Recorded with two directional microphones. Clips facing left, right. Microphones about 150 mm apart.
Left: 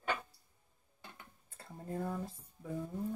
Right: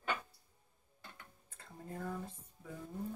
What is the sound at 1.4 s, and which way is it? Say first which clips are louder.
Speech: left 5 dB; 35° left (ahead or behind).